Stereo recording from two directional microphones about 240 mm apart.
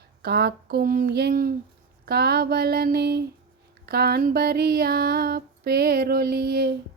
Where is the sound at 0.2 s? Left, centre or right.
Right.